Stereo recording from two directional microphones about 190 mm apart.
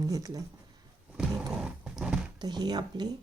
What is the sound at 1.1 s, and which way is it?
Roaring cats, 5° right (ahead or behind).